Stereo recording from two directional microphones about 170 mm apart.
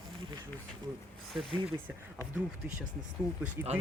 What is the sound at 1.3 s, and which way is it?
Speech, centre (ahead or behind).